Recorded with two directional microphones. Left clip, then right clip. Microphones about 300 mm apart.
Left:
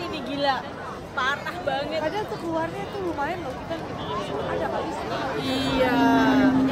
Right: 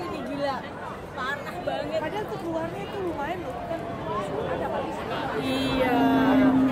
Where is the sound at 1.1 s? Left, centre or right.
Left.